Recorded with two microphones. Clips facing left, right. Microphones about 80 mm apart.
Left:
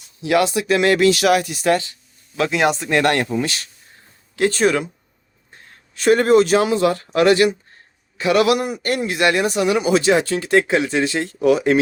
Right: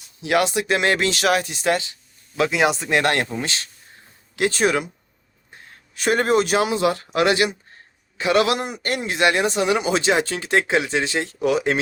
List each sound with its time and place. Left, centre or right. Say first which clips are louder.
0.3 s a man's voice: left 3 dB; right
2.3 s speech: left 1 dB; centre
3.0 s a man's voice: left 3 dB; right
4.4 s speech: left 3 dB; centre
5.9 s a man's voice: left 5 dB; centre